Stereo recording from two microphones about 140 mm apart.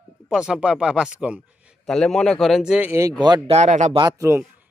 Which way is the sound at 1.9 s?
5° left (ahead or behind).